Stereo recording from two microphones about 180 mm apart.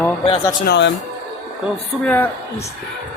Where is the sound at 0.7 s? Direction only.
75° left (ahead or behind).